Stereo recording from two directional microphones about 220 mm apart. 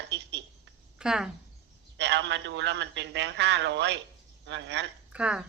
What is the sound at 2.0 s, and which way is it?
A woman's voice, 50° right (ahead or behind).